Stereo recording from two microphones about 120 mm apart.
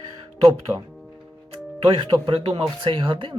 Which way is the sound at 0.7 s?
25° right (ahead or behind).